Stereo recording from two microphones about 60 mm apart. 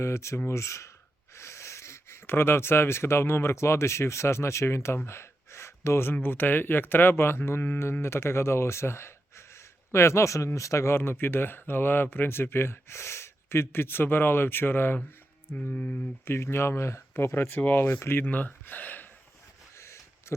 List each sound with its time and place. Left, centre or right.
0.0 s speech: left
1.4 s a sound: left
2.2 s speech: left
15.5 s speech: left
16.2 s speech: left
18.3 s speech: left
19.7 s a sound: left